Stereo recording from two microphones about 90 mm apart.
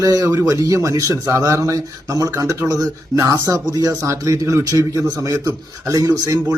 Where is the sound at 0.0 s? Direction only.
40° right (ahead or behind).